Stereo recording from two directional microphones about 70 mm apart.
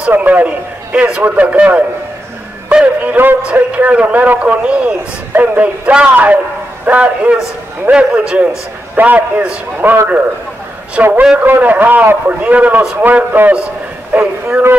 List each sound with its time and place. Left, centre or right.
0.1 s a man's voice: right
2.7 s music: centre
3.5 s a man's voice: right
5.3 s music: right
5.9 s a man's voice: centre